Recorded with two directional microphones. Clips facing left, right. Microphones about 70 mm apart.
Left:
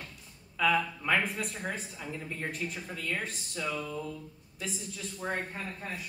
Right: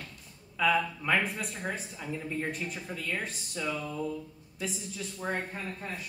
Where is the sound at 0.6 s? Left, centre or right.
Centre.